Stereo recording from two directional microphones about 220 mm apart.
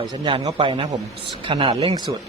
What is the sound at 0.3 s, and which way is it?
Speech, 25° right (ahead or behind).